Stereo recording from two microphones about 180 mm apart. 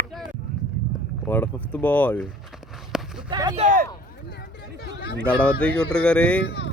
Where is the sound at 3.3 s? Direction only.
25° right (ahead or behind).